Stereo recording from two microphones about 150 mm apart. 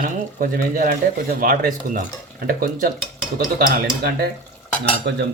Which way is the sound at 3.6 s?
90° right.